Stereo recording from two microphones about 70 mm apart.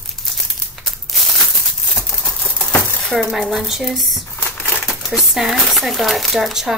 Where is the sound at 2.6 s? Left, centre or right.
Left.